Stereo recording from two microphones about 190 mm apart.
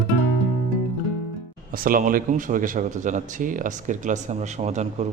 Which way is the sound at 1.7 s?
50° right (ahead or behind).